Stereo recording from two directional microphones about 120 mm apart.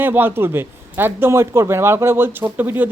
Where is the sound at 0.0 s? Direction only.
15° right (ahead or behind).